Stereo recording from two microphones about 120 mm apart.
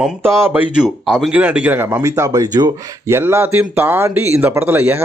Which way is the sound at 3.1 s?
20° right (ahead or behind).